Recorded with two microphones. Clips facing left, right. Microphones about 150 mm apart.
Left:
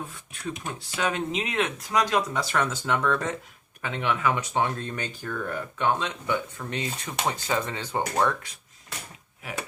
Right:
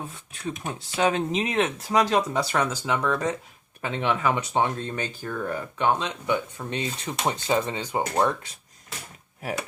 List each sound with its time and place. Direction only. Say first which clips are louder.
0.6 s speech: right 6 dB; 25° right (ahead or behind)
2.8 s speech: right 1 dB; 10° right (ahead or behind)
3.8 s speech: right 2 dB; 30° right (ahead or behind); by 8.4 s 15° right (ahead or behind)